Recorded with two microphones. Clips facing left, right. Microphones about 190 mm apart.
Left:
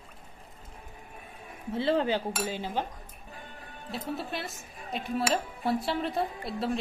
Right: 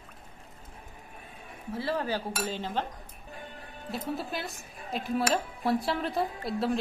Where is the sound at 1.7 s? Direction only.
25° left (ahead or behind).